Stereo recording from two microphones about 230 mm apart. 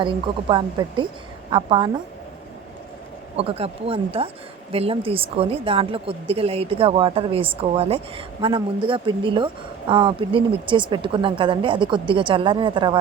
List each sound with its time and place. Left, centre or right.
0.0 s a woman's voice: right
3.3 s a woman's voice: right